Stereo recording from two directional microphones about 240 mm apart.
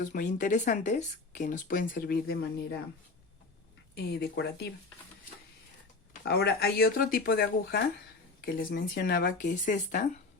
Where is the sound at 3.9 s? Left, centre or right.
Left.